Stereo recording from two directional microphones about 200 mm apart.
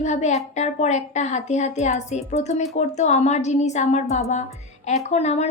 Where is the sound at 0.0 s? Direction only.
35° left (ahead or behind).